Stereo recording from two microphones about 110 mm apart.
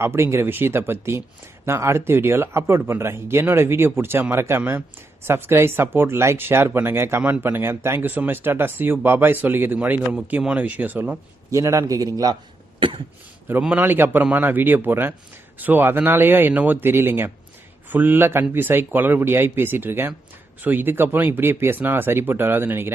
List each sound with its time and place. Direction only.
0.0 s speech: 25° right (ahead or behind)
11.5 s a man's voice: 30° right (ahead or behind)
13.6 s speech: 10° right (ahead or behind)